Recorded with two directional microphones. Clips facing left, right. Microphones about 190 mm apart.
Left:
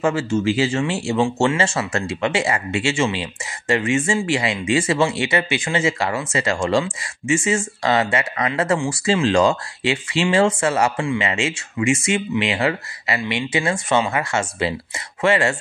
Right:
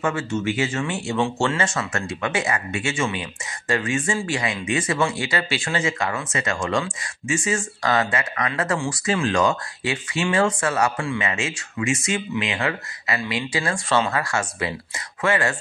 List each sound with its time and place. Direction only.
0.0 s speech: 30° left (ahead or behind)
1.2 s speech: 15° left (ahead or behind)
1.6 s speech: 30° left (ahead or behind)